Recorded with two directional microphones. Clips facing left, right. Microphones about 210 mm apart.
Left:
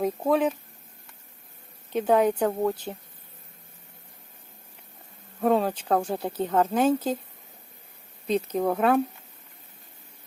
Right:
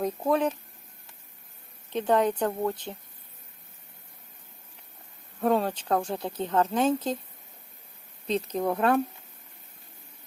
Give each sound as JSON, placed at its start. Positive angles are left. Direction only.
{"t": 0.3, "sound": "speech", "side_deg": 5}
{"t": 1.9, "sound": "speech", "side_deg": 10}
{"t": 2.9, "sound": "speech", "side_deg": 25}
{"t": 5.4, "sound": "speech", "side_deg": 5}
{"t": 8.3, "sound": "speech", "side_deg": 5}